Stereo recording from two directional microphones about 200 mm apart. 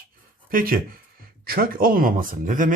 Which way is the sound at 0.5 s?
45° right (ahead or behind).